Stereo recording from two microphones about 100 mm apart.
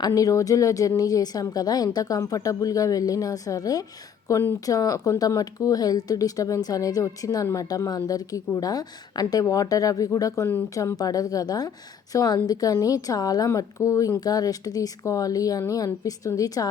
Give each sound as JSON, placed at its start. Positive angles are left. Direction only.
{"t": 0.0, "sound": "a woman's voice", "side_deg": 35}